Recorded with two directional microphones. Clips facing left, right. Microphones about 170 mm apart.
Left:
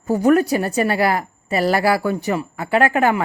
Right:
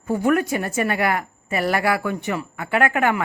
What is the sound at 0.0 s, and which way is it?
A woman's voice, 40° left (ahead or behind).